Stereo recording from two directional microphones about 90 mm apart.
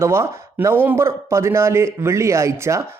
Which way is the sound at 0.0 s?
30° right (ahead or behind).